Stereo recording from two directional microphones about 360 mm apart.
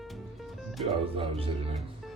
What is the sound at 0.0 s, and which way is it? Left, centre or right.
Music, centre.